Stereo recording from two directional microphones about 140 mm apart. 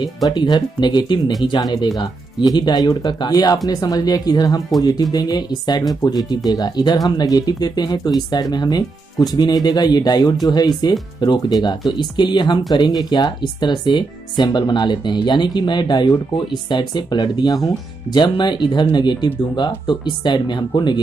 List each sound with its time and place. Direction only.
0.0 s speech: 30° left (ahead or behind)